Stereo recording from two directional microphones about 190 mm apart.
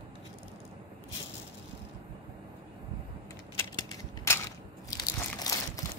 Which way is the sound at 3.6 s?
15° left (ahead or behind).